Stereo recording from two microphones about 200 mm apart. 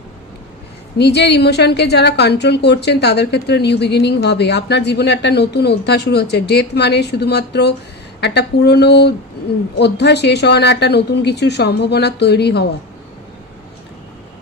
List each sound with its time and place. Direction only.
0.9 s a woman's voice: 55° left (ahead or behind)